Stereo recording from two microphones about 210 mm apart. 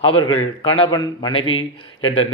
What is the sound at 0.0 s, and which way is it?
A man's voice, 25° left (ahead or behind).